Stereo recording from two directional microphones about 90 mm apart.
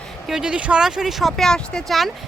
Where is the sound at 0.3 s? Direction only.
10° right (ahead or behind).